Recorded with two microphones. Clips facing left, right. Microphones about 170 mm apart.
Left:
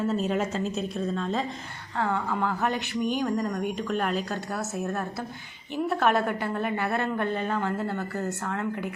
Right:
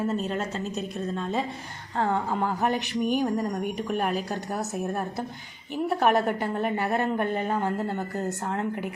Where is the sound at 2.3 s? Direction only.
20° right (ahead or behind).